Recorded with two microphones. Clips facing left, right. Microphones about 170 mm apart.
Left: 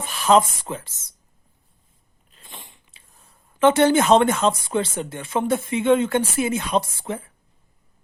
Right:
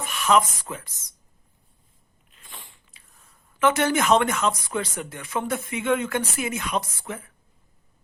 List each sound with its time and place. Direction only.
0.0 s speech: 30° left (ahead or behind)
2.5 s biting: 20° left (ahead or behind)
3.2 s speech: 30° left (ahead or behind)